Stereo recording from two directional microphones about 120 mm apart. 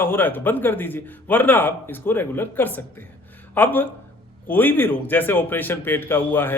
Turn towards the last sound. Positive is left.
turn(degrees=20)  # may be behind; listen again after turning